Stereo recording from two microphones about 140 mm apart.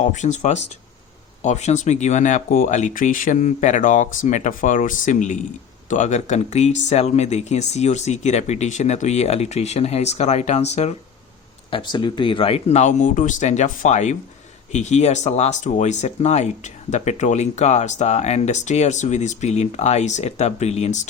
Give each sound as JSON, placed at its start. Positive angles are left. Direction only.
{"t": 0.0, "sound": "speech", "side_deg": 60}
{"t": 11.7, "sound": "speech", "side_deg": 35}